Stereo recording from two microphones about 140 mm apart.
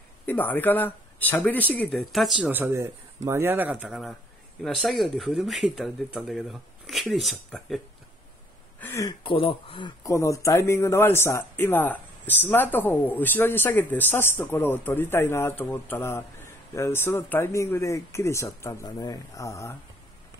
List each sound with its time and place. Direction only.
0.3 s speech: 15° left (ahead or behind)
2.5 s speech: 15° right (ahead or behind); by 7.8 s centre (ahead or behind)
8.7 s a sound: 20° left (ahead or behind)
9.2 s speech: 40° left (ahead or behind)
10.0 s speech: 20° left (ahead or behind)